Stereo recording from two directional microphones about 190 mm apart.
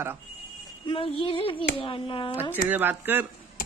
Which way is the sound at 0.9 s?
30° left (ahead or behind).